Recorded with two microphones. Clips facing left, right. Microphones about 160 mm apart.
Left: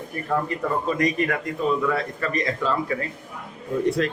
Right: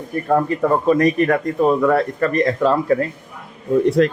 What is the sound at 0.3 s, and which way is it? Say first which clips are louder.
A man's voice: right 8 dB; 50° right (ahead or behind).